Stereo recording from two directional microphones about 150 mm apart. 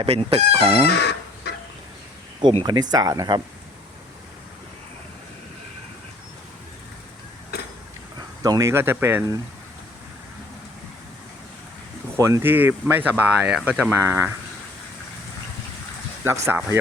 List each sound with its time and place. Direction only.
0.0 s speech: 40° right (ahead or behind)
0.9 s chicken: 90° left
2.4 s speech: 40° right (ahead or behind)
2.9 s speech: 25° right (ahead or behind)
8.4 s speech: 20° right (ahead or behind)
12.1 s speech: 20° right (ahead or behind)
16.2 s speech: 15° right (ahead or behind)